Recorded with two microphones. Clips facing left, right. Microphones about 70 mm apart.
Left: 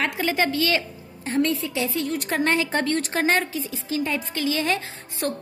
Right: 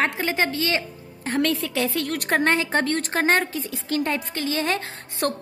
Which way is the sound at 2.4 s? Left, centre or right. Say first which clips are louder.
Left 1 dB; right.